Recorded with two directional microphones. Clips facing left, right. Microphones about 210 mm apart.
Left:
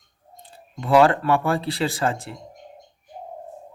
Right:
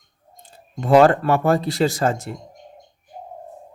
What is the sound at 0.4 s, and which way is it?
Speech, 45° right (ahead or behind).